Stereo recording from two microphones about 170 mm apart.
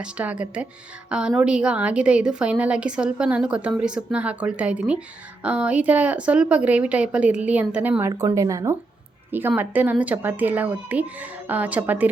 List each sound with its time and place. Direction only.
0.0 s a woman's voice: 5° right (ahead or behind)